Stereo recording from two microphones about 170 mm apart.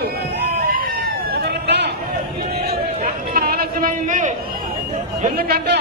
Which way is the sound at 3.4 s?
60° right (ahead or behind).